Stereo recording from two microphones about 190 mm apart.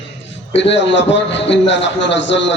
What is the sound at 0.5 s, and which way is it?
A man's voice, 70° left (ahead or behind).